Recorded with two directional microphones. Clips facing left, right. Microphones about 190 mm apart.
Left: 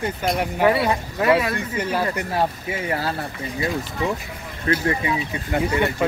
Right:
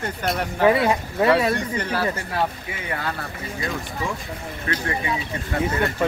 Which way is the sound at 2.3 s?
30° left (ahead or behind).